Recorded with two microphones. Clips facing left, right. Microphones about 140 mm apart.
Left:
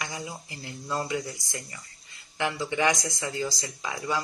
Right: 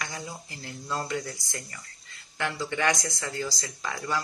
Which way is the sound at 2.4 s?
15° left (ahead or behind).